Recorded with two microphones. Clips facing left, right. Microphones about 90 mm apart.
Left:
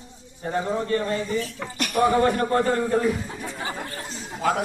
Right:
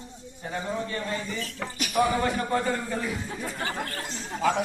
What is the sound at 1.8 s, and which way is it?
Speech, 50° left (ahead or behind).